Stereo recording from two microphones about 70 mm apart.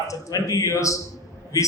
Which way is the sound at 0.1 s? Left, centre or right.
Left.